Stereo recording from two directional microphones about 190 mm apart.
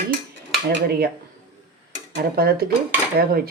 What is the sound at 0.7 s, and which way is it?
Speech, 55° right (ahead or behind).